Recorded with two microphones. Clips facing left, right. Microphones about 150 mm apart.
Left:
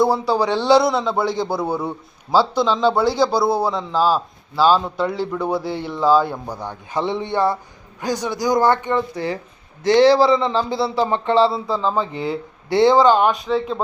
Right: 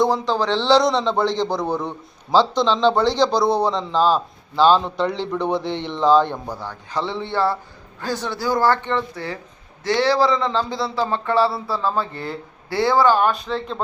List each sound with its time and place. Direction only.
0.0 s a man's voice: 10° left (ahead or behind)
6.6 s a man's voice: 20° left (ahead or behind)
13.3 s speech: 5° left (ahead or behind)